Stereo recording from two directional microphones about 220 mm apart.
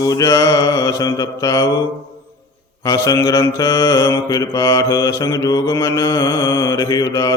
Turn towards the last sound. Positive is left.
turn(degrees=15)  # may be behind; listen again after turning